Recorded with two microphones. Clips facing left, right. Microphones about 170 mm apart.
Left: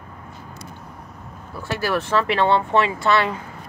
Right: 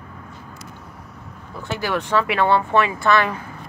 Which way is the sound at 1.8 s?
15° right (ahead or behind).